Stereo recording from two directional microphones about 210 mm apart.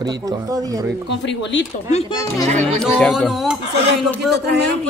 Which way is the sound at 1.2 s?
60° left (ahead or behind).